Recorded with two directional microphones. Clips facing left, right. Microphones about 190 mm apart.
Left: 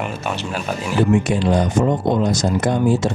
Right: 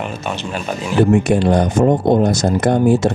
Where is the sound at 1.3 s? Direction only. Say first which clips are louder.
Right 3 dB; 55° right (ahead or behind).